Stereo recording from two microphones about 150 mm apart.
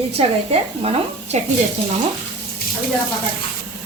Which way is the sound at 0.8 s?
40° right (ahead or behind).